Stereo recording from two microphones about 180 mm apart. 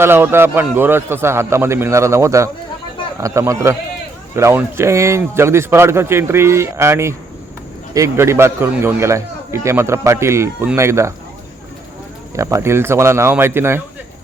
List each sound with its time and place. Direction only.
0.0 s a man's voice: 10° right (ahead or behind)
12.3 s a man's voice: 15° right (ahead or behind)